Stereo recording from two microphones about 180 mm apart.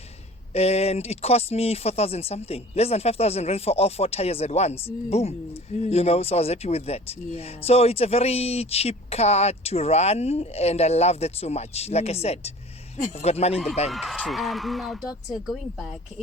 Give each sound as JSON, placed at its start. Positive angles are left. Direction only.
{"t": 0.5, "sound": "speech", "side_deg": 35}
{"t": 13.9, "sound": "speech", "side_deg": 0}